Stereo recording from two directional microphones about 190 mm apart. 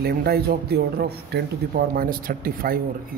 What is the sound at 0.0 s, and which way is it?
Speech, 55° right (ahead or behind).